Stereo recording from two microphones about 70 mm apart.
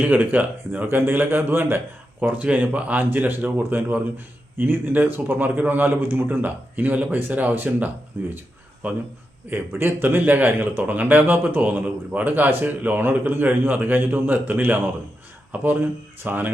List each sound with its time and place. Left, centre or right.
0.0 s speech: right
2.2 s speech: right
9.5 s speech: right